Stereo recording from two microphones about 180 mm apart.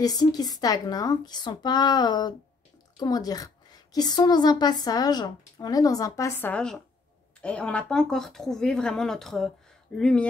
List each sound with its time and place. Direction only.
0.0 s a woman's voice: 20° left (ahead or behind); by 10.2 s 5° left (ahead or behind)